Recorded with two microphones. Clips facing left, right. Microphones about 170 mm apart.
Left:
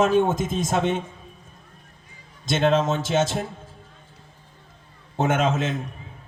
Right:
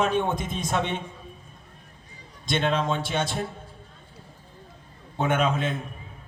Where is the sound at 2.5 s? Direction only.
45° left (ahead or behind).